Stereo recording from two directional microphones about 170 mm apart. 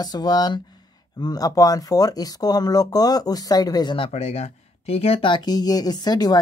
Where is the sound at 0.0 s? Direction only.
25° left (ahead or behind).